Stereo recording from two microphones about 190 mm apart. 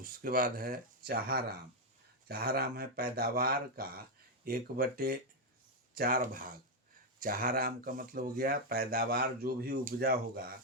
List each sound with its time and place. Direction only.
0.0 s speech: 50° right (ahead or behind)